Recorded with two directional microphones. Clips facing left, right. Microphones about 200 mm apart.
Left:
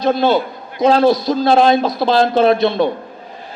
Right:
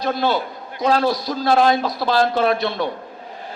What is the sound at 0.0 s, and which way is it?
A man's voice, 25° left (ahead or behind).